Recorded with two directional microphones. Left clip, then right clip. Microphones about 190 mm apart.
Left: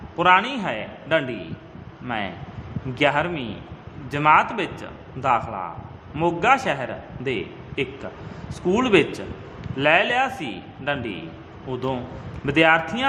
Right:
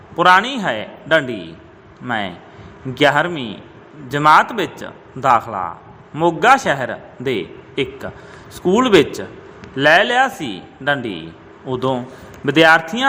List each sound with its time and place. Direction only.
0.2 s a man's voice: 25° right (ahead or behind)